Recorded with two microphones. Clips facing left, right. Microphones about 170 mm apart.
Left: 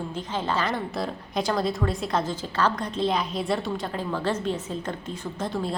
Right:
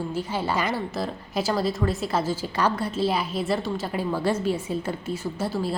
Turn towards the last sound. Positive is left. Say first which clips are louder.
# right 2 dB
turn(degrees=-5)  # may be behind; listen again after turning